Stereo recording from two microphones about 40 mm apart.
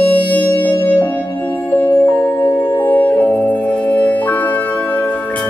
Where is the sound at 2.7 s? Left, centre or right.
Left.